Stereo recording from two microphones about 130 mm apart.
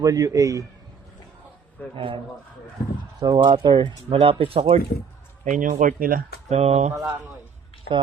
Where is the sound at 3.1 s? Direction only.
35° right (ahead or behind).